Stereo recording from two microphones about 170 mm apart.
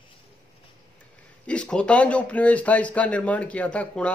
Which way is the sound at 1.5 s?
5° left (ahead or behind).